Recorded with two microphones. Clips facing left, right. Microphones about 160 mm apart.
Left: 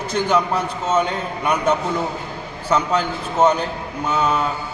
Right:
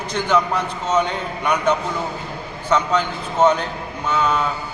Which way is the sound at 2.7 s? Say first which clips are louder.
Even; 10° left (ahead or behind).